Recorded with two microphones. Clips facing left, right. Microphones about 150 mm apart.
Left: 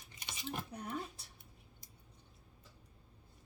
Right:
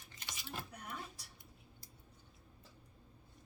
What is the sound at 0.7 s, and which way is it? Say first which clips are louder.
Speech: left 6 dB; 30° left (ahead or behind).